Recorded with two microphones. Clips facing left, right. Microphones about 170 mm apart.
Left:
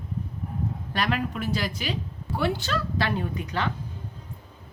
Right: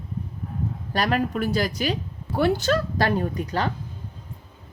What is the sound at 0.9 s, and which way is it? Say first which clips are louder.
A woman's voice: right 5 dB; 40° right (ahead or behind).